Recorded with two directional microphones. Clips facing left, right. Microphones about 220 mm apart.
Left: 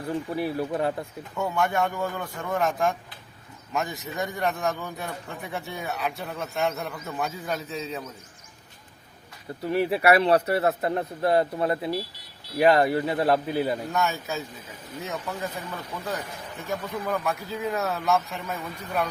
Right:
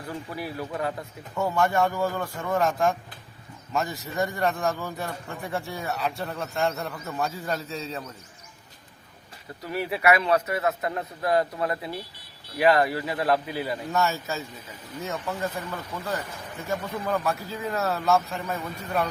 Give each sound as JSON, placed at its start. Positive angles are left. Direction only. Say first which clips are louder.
{"t": 0.1, "sound": "a man's voice", "louder": "left 6 dB", "side_deg": 25}
{"t": 1.4, "sound": "a man's voice", "louder": "right 2 dB", "side_deg": 0}
{"t": 9.6, "sound": "a man's voice", "louder": "left 3 dB", "side_deg": 30}
{"t": 13.9, "sound": "a man's voice", "louder": "right 1 dB", "side_deg": 0}
{"t": 16.6, "sound": "a man's voice", "louder": "right 1 dB", "side_deg": 0}